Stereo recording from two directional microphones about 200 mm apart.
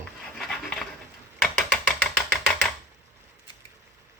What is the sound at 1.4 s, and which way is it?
Ratchet, 5° left (ahead or behind).